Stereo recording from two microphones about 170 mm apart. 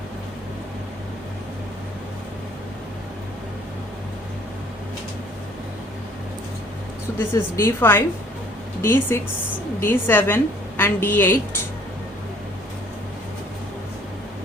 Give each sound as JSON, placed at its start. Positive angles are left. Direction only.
{"t": 7.3, "sound": "speech", "side_deg": 15}